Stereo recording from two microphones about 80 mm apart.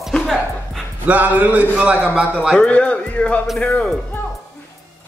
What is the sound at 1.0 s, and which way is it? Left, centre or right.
A man's voice, centre.